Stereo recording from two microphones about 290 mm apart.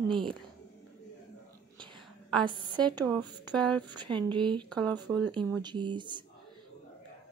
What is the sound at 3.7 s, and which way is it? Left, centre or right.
Speech, centre.